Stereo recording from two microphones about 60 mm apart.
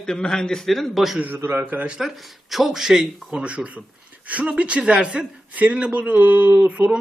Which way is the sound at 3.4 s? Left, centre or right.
Right.